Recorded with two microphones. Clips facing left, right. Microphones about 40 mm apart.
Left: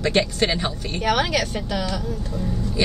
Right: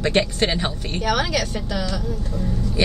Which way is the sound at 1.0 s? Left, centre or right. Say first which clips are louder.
Left 1 dB; centre.